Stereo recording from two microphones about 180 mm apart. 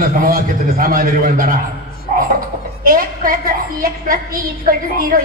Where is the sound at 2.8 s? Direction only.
50° right (ahead or behind).